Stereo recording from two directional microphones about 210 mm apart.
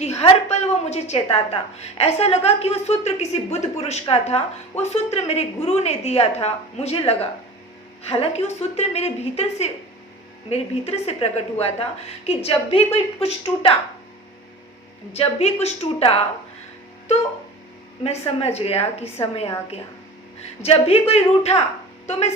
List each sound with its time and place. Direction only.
0.2 s a woman's voice: 30° left (ahead or behind)
15.1 s a woman's voice: 30° left (ahead or behind)
18.0 s a woman's voice: 30° left (ahead or behind)
20.6 s a woman's voice: 30° left (ahead or behind)